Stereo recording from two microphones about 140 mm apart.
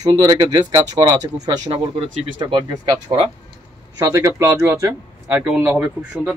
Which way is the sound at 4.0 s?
20° right (ahead or behind).